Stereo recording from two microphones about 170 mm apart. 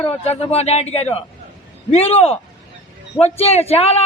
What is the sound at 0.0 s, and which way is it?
Speech, 35° left (ahead or behind).